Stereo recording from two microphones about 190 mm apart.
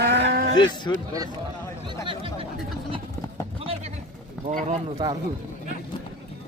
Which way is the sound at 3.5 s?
30° right (ahead or behind).